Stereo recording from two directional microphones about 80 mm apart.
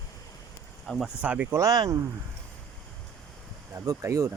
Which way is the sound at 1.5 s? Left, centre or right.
Right.